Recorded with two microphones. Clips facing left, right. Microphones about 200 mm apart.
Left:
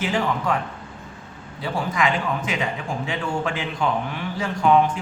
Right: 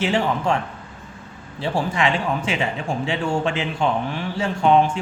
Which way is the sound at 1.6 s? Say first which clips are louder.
Right 2 dB; 30° right (ahead or behind).